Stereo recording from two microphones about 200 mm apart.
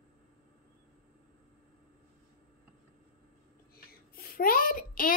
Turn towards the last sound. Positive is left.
turn(degrees=45)  # may be behind; listen again after turning